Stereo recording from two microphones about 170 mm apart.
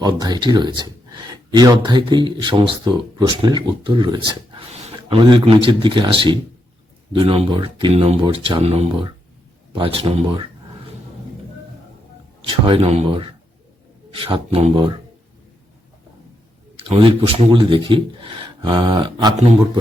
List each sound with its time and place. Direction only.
0.0 s speech: 25° right (ahead or behind)
12.4 s speech: 30° right (ahead or behind)
16.7 s speech: 35° right (ahead or behind)